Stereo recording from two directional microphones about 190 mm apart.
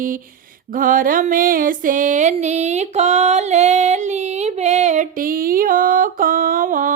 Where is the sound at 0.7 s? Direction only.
45° right (ahead or behind).